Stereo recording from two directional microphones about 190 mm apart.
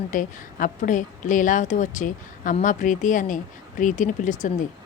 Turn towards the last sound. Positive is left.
turn(degrees=40)  # may be behind; listen again after turning